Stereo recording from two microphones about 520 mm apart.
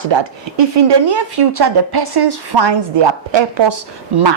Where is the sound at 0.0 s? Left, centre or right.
Right.